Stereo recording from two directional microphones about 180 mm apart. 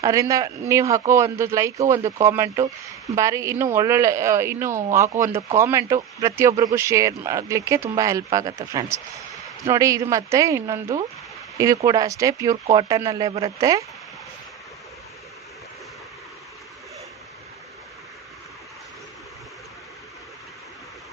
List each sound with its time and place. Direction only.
0.0 s a man's voice: 15° right (ahead or behind)